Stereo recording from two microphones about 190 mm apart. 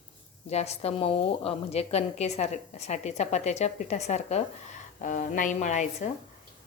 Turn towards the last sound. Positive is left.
turn(degrees=40)  # may be behind; listen again after turning